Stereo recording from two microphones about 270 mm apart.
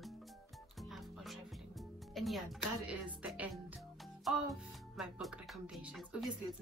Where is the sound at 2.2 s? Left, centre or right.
Centre.